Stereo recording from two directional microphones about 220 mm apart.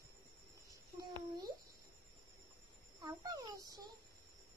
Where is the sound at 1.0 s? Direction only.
20° right (ahead or behind).